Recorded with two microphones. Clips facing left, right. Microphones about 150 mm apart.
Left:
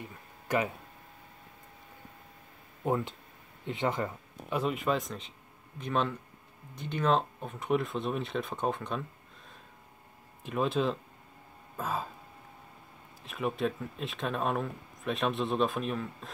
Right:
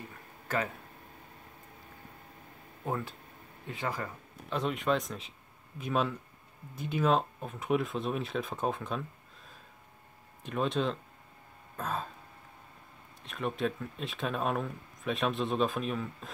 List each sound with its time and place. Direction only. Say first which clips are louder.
0.5 s speech: left 3 dB; 15° left (ahead or behind)
2.8 s speech: left 5 dB; 20° left (ahead or behind)
4.5 s speech: even; 5° left (ahead or behind)
10.4 s speech: left 1 dB; centre (ahead or behind)
11.7 s throat clearing: left 1 dB; 5° left (ahead or behind)
13.2 s speech: left 1 dB; 5° left (ahead or behind)